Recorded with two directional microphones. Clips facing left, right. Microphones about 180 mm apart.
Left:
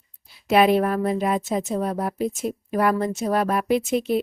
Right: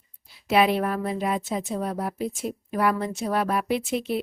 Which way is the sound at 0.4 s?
50° left (ahead or behind).